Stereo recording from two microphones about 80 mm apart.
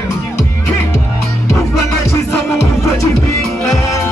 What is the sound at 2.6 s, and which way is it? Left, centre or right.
Music, left.